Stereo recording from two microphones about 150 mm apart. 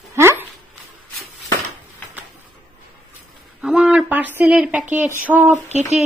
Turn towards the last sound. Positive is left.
turn(degrees=-50)  # may be behind; listen again after turning